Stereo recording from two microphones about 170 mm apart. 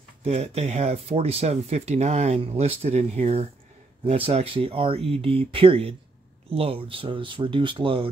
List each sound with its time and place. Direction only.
0.2 s speech: 40° right (ahead or behind)